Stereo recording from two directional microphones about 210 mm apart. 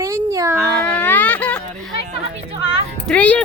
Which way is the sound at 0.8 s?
10° left (ahead or behind).